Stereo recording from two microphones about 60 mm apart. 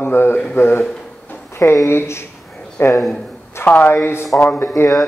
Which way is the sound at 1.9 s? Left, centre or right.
Left.